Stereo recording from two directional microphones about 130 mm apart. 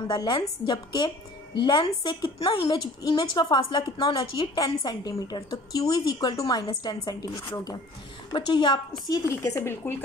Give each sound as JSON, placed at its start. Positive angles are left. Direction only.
{"t": 0.1, "sound": "a woman's voice", "side_deg": 35}
{"t": 9.1, "sound": "speech", "side_deg": 20}